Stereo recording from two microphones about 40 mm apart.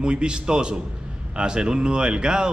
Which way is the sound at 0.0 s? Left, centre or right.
Right.